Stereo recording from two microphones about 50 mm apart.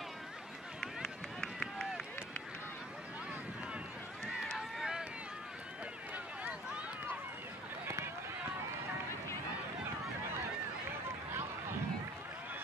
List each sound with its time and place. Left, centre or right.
0.7 s run: centre
4.6 s run: centre
6.1 s a sound: right